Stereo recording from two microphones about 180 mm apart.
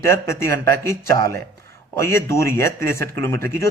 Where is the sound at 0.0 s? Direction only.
15° left (ahead or behind).